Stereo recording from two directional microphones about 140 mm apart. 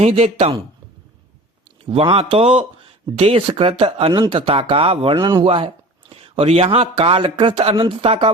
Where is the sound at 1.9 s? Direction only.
45° right (ahead or behind).